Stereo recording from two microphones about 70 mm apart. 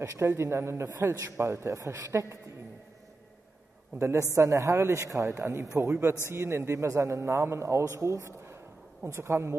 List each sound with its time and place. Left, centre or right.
0.0 s a man's voice: right
4.0 s a man's voice: right